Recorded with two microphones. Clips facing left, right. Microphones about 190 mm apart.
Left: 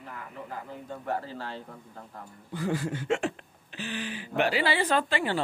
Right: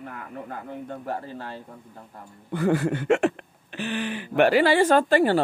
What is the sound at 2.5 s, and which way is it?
Speech, 65° right (ahead or behind).